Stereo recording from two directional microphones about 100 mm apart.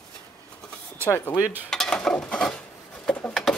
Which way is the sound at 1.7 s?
5° left (ahead or behind).